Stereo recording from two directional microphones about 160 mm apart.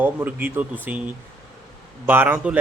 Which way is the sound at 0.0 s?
10° right (ahead or behind).